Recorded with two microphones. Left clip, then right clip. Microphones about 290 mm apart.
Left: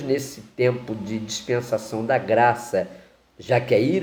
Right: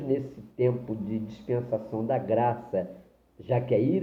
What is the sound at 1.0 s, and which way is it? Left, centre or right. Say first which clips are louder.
Speech: left 6 dB; left.